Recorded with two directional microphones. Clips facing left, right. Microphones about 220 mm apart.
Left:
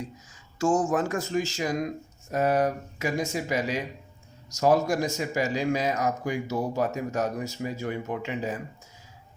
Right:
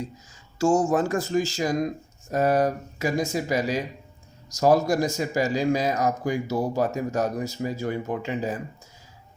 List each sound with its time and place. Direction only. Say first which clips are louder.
0.6 s speech: right 3 dB; 30° right (ahead or behind)